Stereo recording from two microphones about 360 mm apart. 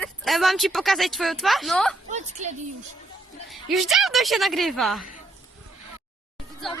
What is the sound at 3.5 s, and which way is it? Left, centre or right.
Speech, centre.